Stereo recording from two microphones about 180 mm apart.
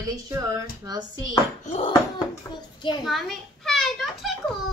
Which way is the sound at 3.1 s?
Centre (ahead or behind).